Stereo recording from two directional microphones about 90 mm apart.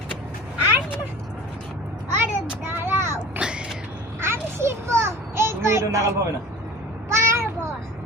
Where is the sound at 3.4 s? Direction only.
10° right (ahead or behind).